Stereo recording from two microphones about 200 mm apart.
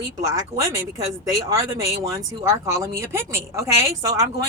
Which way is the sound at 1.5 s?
15° right (ahead or behind).